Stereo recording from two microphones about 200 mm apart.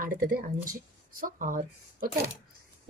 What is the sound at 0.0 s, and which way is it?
Speech, 45° right (ahead or behind).